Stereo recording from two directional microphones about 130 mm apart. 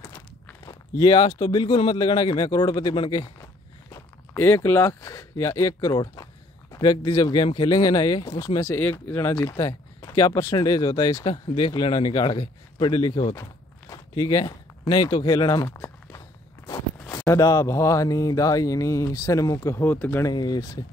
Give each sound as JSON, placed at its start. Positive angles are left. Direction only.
{"t": 0.7, "sound": "speech", "side_deg": 35}
{"t": 4.3, "sound": "speech", "side_deg": 15}
{"t": 20.3, "sound": "speech", "side_deg": 30}